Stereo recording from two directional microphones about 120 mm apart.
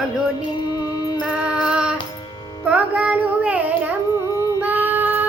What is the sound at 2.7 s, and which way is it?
Child singing, 10° right (ahead or behind).